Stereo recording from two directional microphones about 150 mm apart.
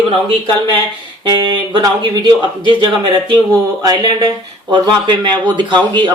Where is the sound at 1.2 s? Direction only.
30° right (ahead or behind).